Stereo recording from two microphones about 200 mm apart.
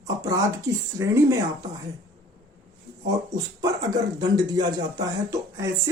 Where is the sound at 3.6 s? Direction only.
20° right (ahead or behind).